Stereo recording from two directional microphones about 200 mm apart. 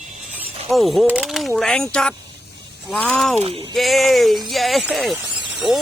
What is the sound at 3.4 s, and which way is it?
Speech, 30° right (ahead or behind).